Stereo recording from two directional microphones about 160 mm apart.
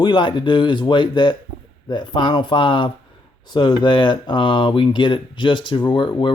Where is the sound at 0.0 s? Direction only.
30° left (ahead or behind).